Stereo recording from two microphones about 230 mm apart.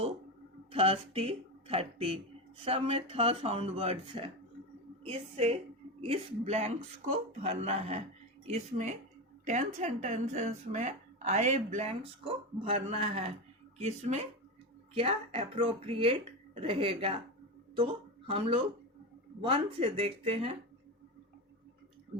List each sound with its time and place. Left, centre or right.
0.7 s speech: right